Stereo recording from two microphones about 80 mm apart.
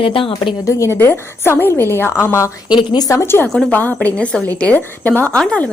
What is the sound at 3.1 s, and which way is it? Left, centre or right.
A woman's voice, left.